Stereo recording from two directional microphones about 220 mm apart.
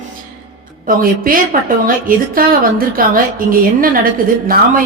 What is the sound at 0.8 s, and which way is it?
A woman's voice, 40° right (ahead or behind).